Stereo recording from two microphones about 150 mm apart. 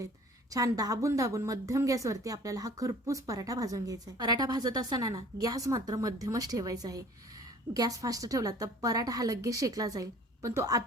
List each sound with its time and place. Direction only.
0.5 s a woman's voice: 25° right (ahead or behind)